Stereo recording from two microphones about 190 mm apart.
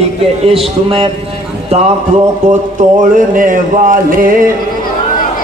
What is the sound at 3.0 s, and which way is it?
Music, 45° right (ahead or behind).